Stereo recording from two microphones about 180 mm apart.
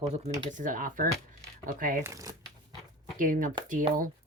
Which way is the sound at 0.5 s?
45° right (ahead or behind).